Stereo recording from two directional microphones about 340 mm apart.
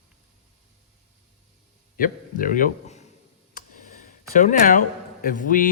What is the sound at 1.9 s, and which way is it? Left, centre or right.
A man's voice, left.